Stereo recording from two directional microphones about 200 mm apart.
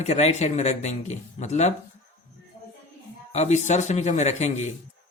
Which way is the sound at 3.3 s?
35° left (ahead or behind).